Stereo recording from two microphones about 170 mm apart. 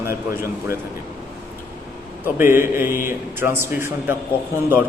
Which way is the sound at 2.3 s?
15° right (ahead or behind).